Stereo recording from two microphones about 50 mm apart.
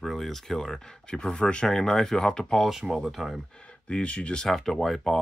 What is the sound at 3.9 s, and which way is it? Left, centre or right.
Speech, left.